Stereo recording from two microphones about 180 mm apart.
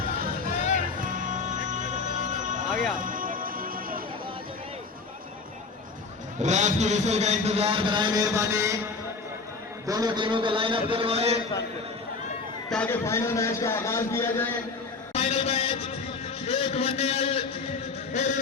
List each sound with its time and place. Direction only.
0.5 s music: 40° left (ahead or behind)
0.9 s music: 50° right (ahead or behind)
6.4 s a man's voice: 40° right (ahead or behind); by 8.8 s 15° right (ahead or behind)
9.8 s a man's voice: 20° right (ahead or behind)
12.7 s a man's voice: 10° left (ahead or behind)
15.1 s a sound: 35° left (ahead or behind)
16.5 s a man's voice: 35° left (ahead or behind)
18.1 s a sound: 40° left (ahead or behind)